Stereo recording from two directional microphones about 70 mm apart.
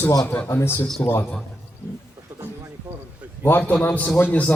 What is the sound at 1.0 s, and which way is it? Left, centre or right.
Speech, centre.